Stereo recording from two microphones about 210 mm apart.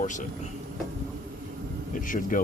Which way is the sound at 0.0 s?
35° left (ahead or behind).